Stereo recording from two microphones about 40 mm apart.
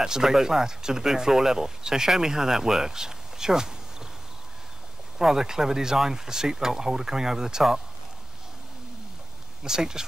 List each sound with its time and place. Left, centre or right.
0.0 s speech: centre
5.2 s speech: centre
9.6 s speech: centre